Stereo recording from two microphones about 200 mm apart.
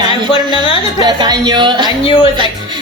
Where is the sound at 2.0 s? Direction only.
25° left (ahead or behind).